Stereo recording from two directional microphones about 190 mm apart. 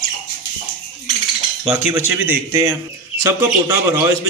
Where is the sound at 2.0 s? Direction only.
10° right (ahead or behind).